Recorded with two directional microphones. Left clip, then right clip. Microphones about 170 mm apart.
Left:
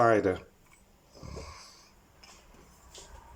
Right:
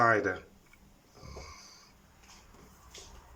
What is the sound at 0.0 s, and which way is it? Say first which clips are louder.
Speech: left 2 dB; 20° left (ahead or behind).